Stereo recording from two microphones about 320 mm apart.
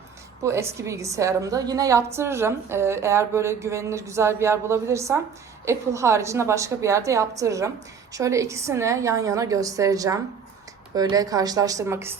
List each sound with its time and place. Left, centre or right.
0.4 s a woman's voice: centre